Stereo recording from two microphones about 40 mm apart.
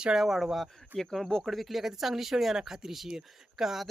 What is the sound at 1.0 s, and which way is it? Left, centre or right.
Speech, centre.